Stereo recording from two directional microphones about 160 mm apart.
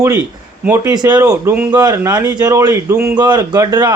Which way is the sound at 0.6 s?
15° right (ahead or behind).